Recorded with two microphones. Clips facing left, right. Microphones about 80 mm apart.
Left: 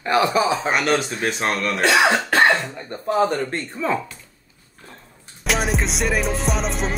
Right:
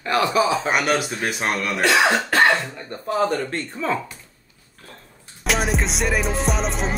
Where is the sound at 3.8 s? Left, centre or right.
Centre.